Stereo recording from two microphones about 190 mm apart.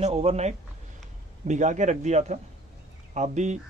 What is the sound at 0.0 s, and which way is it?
Speech, 35° right (ahead or behind).